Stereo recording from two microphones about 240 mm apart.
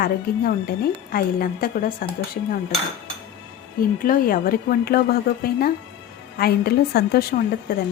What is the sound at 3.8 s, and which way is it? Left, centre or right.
A woman's voice, left.